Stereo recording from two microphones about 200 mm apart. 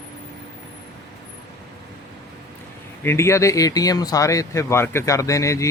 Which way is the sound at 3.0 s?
15° left (ahead or behind).